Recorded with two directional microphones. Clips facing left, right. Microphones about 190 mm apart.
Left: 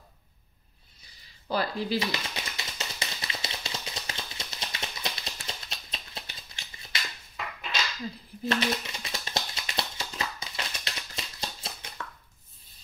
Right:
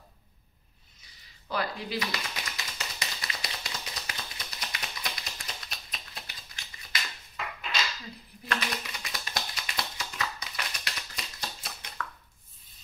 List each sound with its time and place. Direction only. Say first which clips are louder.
1.5 s tap: left 4 dB; 30° left (ahead or behind)
8.5 s typewriter: left 6 dB; 25° left (ahead or behind)